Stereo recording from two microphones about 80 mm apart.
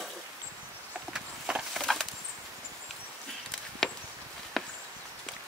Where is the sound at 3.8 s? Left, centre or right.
Centre.